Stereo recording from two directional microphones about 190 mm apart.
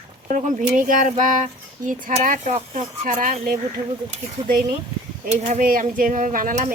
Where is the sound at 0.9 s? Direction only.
40° right (ahead or behind).